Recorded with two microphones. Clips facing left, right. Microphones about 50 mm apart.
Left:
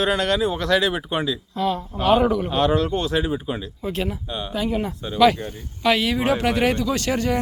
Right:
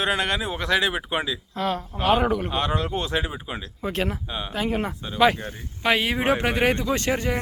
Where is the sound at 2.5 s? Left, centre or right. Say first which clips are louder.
Left 5 dB; centre.